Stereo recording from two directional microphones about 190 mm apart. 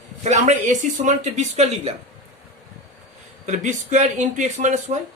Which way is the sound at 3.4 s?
40° right (ahead or behind).